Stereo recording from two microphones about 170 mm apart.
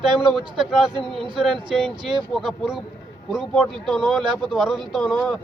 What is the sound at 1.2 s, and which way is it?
Speech, 30° right (ahead or behind).